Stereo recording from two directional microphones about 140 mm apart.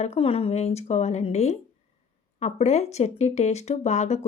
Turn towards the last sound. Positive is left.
turn(degrees=55)  # may be behind; listen again after turning